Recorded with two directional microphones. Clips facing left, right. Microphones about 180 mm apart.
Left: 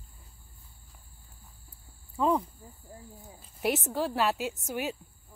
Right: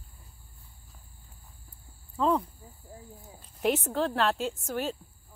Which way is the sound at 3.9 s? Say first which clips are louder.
Right 1 dB; 10° left (ahead or behind).